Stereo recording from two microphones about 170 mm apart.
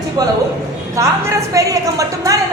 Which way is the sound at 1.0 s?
20° right (ahead or behind).